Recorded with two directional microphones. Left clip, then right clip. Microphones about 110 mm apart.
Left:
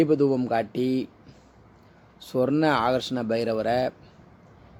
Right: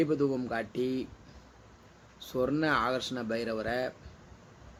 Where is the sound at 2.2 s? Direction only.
40° left (ahead or behind).